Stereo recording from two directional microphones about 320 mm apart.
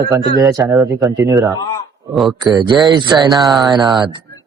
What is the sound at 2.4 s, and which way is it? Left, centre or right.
Speech, centre.